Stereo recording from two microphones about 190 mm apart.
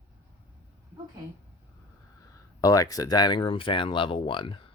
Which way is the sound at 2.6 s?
20° left (ahead or behind).